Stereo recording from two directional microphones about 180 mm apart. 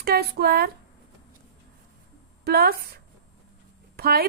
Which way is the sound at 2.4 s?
60° right (ahead or behind).